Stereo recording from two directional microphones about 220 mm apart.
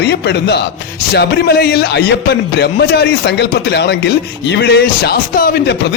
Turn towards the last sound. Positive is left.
turn(degrees=40)  # may be behind; listen again after turning